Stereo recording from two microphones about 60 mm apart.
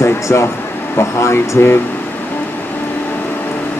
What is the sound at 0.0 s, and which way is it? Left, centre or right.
Speech, left.